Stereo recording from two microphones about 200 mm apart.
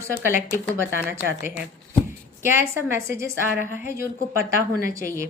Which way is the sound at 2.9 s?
15° right (ahead or behind).